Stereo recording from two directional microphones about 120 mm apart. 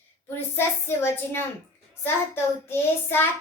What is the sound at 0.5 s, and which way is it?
Speech, 20° left (ahead or behind).